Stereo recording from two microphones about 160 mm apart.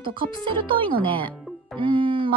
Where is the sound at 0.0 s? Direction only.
30° right (ahead or behind).